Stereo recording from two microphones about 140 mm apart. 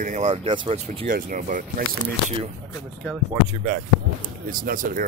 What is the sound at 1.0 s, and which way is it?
Speech, 70° right (ahead or behind).